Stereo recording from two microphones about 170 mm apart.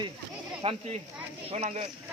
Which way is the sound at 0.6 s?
35° right (ahead or behind).